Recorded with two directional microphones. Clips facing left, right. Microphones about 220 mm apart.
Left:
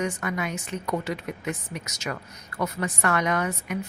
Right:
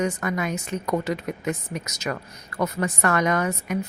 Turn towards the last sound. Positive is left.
turn(degrees=-40)  # may be behind; listen again after turning